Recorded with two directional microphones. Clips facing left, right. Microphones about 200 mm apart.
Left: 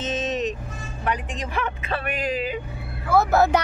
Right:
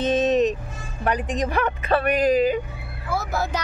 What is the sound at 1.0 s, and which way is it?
Speech, 40° right (ahead or behind).